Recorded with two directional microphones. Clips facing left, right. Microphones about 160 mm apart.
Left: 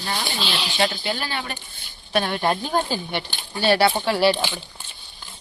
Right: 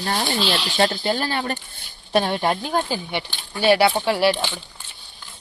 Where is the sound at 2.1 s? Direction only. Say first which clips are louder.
Right 3 dB; 30° right (ahead or behind).